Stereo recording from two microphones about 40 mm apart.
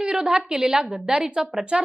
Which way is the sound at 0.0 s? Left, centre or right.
Right.